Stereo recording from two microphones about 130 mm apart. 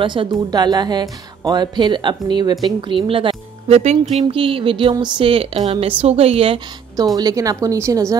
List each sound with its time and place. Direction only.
0.0 s a woman's voice: 40° right (ahead or behind)
7.2 s speech: 30° right (ahead or behind)